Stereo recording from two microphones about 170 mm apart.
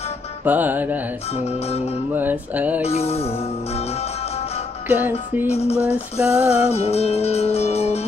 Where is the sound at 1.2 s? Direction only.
35° left (ahead or behind).